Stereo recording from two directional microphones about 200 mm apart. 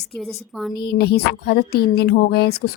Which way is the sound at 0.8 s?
50° left (ahead or behind).